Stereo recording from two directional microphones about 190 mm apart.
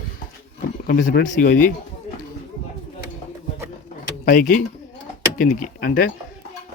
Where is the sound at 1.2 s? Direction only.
45° left (ahead or behind).